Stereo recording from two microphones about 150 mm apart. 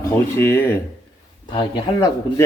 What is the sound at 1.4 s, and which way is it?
Speech, 30° left (ahead or behind).